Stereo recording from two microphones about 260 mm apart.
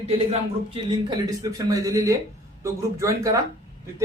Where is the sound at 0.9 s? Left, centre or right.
Centre.